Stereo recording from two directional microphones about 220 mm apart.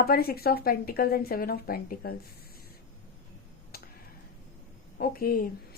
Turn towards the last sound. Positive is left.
turn(degrees=40)  # may be behind; listen again after turning